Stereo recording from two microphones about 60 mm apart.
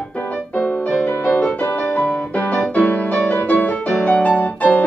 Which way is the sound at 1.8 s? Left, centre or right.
Left.